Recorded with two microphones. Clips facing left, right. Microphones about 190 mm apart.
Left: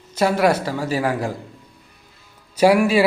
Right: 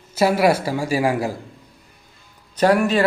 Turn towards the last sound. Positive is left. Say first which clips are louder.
# left 2 dB
turn(degrees=10)  # may be behind; listen again after turning